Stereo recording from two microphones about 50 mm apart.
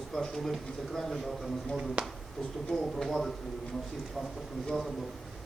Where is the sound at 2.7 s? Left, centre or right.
Centre.